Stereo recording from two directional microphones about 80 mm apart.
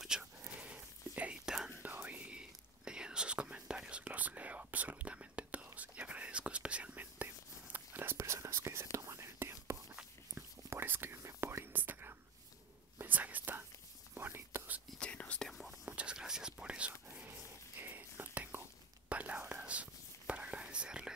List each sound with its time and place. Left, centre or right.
0.0 s a sound: centre
0.4 s whispering: centre
1.7 s whispering: right
15.0 s whispering: centre
15.4 s whispering: centre
15.8 s whispering: centre
17.1 s whispering: right